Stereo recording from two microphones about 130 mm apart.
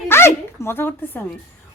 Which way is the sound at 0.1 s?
20° left (ahead or behind).